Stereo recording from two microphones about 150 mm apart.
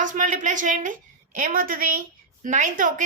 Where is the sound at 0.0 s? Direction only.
60° right (ahead or behind).